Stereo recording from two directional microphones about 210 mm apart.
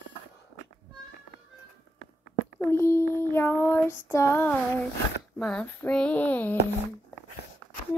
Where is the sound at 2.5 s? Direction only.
10° left (ahead or behind).